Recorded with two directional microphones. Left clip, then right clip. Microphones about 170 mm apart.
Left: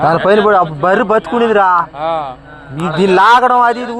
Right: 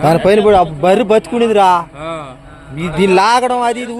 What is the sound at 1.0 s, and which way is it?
Speech, 40° right (ahead or behind).